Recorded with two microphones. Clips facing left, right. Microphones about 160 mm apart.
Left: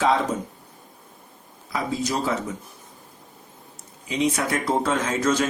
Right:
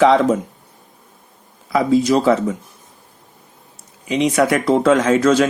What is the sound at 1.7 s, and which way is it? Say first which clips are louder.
Speech: right 11 dB; 90° right.